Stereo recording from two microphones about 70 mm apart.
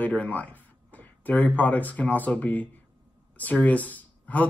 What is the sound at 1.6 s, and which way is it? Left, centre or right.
Speech, left.